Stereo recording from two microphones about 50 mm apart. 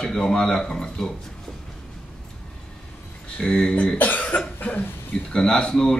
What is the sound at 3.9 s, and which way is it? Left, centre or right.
Cough, left.